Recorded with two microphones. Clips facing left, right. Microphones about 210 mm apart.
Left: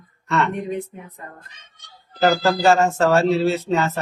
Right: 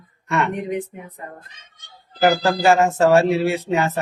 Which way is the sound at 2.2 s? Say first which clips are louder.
Even; 15° right (ahead or behind).